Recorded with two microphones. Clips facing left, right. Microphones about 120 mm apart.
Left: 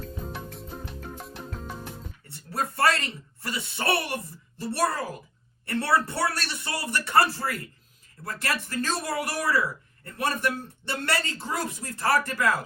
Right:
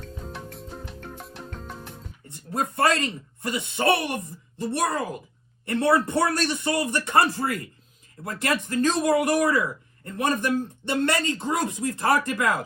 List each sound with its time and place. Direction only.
0.0 s music: 5° left (ahead or behind)
2.2 s speech: 20° right (ahead or behind)